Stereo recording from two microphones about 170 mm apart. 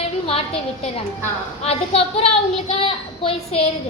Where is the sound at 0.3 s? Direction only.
35° left (ahead or behind).